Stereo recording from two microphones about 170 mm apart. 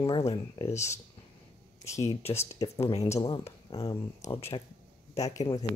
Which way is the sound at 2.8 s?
35° left (ahead or behind).